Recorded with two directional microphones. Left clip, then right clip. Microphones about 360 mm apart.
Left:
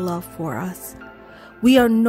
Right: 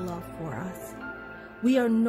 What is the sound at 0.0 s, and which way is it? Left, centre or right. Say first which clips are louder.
Speech: left 9 dB; centre.